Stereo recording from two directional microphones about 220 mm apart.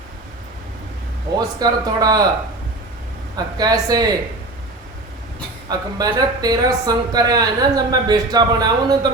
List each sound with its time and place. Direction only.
1.5 s speech: 15° right (ahead or behind)
3.3 s speech: 20° right (ahead or behind)
5.6 s speech: 15° right (ahead or behind)